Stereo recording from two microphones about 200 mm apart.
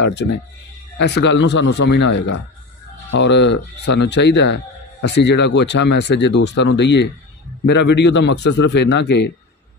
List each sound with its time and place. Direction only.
0.0 s speech: 60° left (ahead or behind)